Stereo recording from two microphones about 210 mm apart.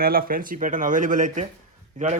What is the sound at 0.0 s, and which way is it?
Speech, 45° right (ahead or behind).